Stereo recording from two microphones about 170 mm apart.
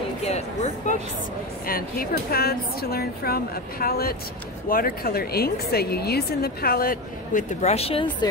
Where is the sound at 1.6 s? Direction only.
60° left (ahead or behind); by 8.0 s 35° left (ahead or behind).